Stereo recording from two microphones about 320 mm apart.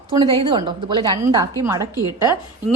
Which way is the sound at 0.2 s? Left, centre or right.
Centre.